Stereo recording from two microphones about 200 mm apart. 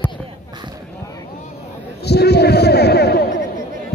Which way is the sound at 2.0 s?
55° left (ahead or behind).